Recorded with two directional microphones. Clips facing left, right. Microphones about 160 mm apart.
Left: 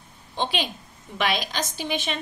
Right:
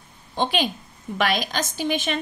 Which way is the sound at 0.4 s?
50° right (ahead or behind).